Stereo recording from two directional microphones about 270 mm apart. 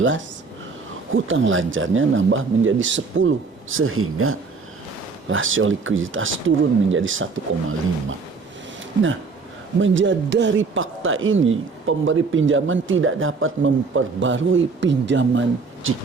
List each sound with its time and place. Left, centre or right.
1.1 s speech: right
9.8 s speech: right